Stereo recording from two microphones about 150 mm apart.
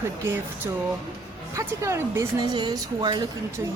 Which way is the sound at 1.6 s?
20° right (ahead or behind).